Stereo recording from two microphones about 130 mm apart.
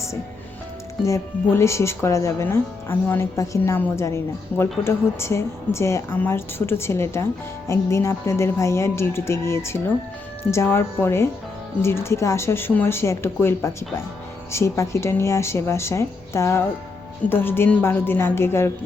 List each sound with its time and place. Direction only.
1.0 s a woman's voice: 20° left (ahead or behind)